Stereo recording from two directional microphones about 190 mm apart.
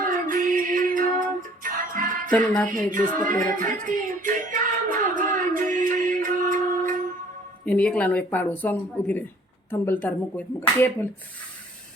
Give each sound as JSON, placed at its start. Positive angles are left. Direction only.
{"t": 0.0, "sound": "music", "side_deg": -45}
{"t": 2.3, "sound": "a woman's voice", "side_deg": 5}
{"t": 2.6, "sound": "music", "side_deg": -45}
{"t": 7.6, "sound": "a woman's voice", "side_deg": 5}